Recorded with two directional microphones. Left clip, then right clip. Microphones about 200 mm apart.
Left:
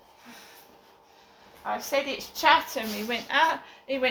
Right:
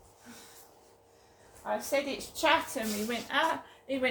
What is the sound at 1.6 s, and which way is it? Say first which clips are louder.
A woman's voice: left 3 dB; 30° right (ahead or behind).